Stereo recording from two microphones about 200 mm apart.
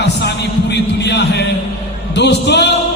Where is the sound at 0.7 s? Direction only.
60° left (ahead or behind).